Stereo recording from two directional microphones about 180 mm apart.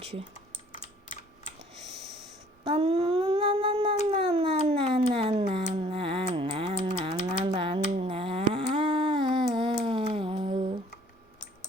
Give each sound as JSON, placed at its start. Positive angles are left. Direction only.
{"t": 0.0, "sound": "speech", "side_deg": -35}
{"t": 2.6, "sound": "humming", "side_deg": -35}
{"t": 4.1, "sound": "speech", "side_deg": -30}
{"t": 5.8, "sound": "typing", "side_deg": -30}